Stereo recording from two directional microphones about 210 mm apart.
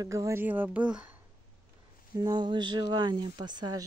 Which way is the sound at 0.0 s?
15° right (ahead or behind).